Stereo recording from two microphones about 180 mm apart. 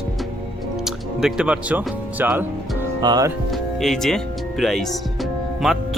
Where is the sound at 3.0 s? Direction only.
20° right (ahead or behind).